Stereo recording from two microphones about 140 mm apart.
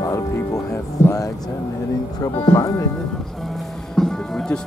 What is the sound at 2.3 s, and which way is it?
Speech, 30° left (ahead or behind).